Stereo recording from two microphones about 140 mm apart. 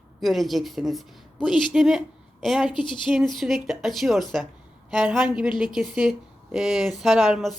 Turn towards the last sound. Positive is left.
turn(degrees=-5)  # may be behind; listen again after turning